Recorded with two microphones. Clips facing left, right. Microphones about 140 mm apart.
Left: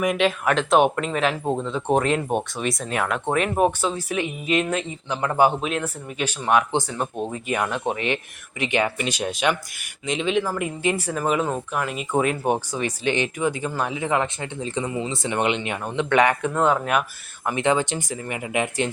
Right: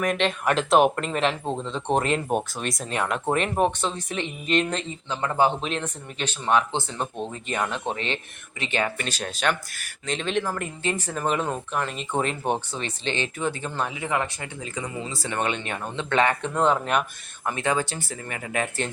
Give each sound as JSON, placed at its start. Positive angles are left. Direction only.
{"t": 0.0, "sound": "speech", "side_deg": 10}
{"t": 17.4, "sound": "speech", "side_deg": 20}